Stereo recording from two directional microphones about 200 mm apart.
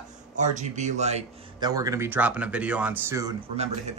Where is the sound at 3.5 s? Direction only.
30° right (ahead or behind).